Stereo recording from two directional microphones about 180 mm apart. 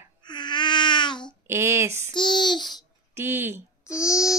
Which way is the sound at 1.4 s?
15° right (ahead or behind).